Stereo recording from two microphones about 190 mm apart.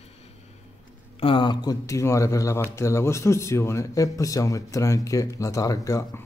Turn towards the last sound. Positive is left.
turn(degrees=15)  # may be behind; listen again after turning